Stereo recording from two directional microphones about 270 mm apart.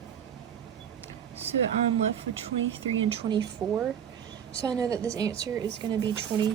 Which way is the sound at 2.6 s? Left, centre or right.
Right.